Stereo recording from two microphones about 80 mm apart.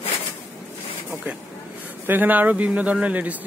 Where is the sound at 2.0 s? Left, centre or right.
Right.